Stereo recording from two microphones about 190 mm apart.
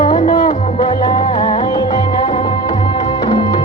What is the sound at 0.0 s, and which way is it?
Music, 25° left (ahead or behind).